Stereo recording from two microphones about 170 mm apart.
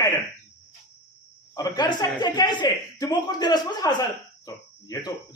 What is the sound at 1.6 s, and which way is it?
A man's voice, 25° left (ahead or behind).